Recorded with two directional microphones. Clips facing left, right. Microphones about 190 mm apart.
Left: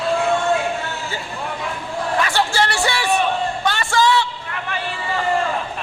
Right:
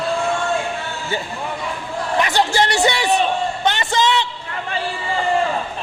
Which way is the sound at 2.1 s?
20° right (ahead or behind).